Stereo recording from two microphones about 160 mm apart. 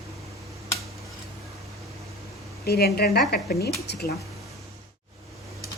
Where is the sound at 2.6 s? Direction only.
75° left (ahead or behind).